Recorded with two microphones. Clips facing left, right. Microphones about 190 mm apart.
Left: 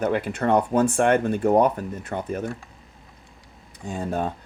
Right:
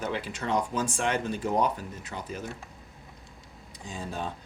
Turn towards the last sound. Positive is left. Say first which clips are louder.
# left 9 dB
turn(degrees=55)  # may be behind; listen again after turning